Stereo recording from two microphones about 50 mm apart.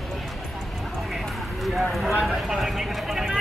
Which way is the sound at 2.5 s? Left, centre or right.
Centre.